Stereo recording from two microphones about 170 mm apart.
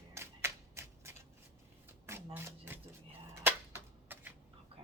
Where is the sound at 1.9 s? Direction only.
15° right (ahead or behind).